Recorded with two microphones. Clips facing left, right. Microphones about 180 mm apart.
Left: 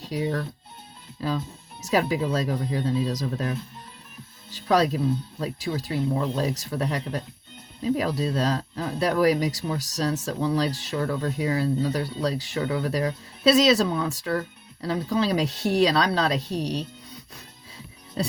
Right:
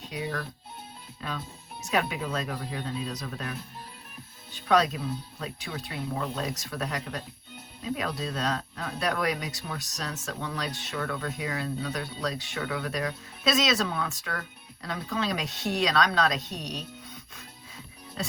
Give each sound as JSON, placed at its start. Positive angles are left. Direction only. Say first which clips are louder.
{"t": 0.0, "sound": "speech", "louder": "left 6 dB", "side_deg": 35}